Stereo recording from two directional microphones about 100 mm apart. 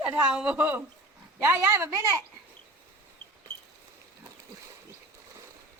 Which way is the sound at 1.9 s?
35° right (ahead or behind).